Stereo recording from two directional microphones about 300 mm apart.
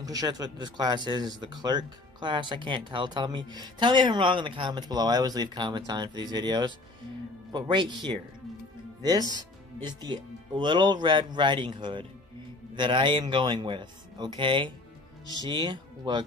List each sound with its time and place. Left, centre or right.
0.0 s speech: centre
9.2 s speech: centre
9.8 s speech: centre